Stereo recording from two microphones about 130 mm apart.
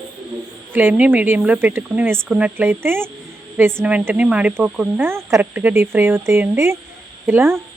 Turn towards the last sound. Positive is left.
turn(degrees=-15)  # may be behind; listen again after turning